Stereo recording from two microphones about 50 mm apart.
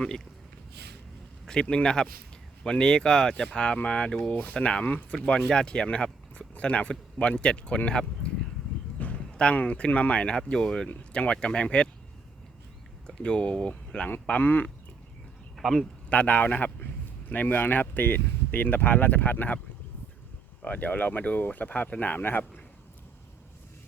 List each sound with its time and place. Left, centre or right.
1.7 s speech: centre
9.0 s a sound: left
9.3 s speech: left
10.8 s speech: left
13.1 s speech: centre
14.3 s speech: left
15.5 s a man's voice: centre
16.0 s speech: left
20.7 s speech: left